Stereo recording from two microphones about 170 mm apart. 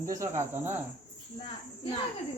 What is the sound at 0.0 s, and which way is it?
Speech, 20° right (ahead or behind).